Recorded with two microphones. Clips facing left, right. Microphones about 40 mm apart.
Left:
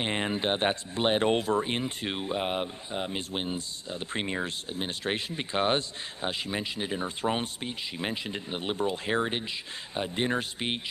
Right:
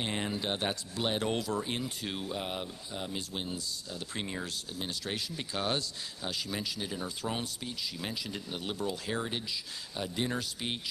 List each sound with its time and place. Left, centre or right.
0.0 s speech: left